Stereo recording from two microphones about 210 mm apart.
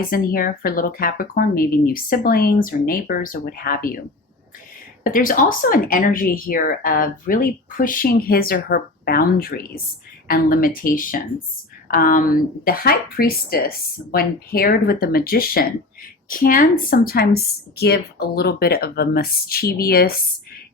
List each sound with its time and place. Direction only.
0.0 s speech: 45° left (ahead or behind)
5.0 s speech: 40° left (ahead or behind)